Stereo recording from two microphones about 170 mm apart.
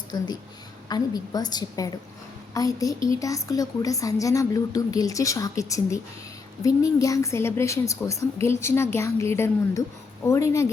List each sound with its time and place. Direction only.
0.9 s a woman's voice: 20° left (ahead or behind)